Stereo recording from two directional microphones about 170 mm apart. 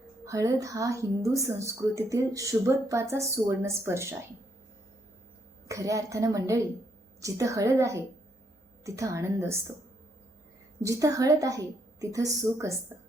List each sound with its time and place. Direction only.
0.3 s a woman's voice: 20° right (ahead or behind)
5.6 s a woman's voice: 20° right (ahead or behind)
10.8 s a woman's voice: 20° right (ahead or behind)